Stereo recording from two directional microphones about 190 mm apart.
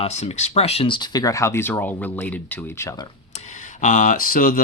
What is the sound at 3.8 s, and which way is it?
Speech, 40° left (ahead or behind).